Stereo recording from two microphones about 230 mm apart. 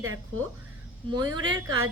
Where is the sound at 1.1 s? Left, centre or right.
Centre.